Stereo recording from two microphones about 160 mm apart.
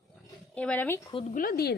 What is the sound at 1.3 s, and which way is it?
Speech, 70° left (ahead or behind).